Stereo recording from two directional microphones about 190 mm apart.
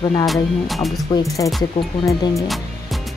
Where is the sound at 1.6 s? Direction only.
20° left (ahead or behind).